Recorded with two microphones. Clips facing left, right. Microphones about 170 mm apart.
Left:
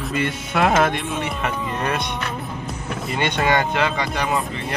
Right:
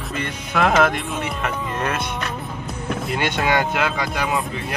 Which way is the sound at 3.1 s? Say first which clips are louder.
Left 2 dB; 5° right (ahead or behind).